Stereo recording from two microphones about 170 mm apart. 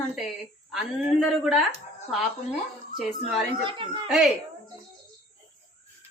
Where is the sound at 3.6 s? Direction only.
30° right (ahead or behind).